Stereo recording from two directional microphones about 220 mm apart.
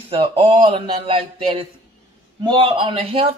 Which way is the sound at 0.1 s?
25° right (ahead or behind).